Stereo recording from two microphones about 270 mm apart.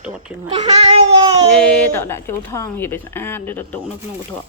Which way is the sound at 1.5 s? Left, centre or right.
Centre.